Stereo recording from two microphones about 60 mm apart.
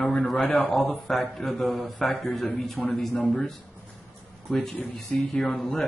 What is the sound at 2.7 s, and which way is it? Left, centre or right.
Speech, left.